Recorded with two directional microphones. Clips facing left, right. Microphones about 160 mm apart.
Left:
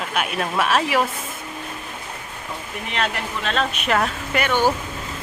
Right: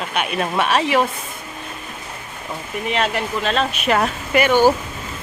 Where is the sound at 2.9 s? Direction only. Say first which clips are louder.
Right 4 dB; centre (ahead or behind).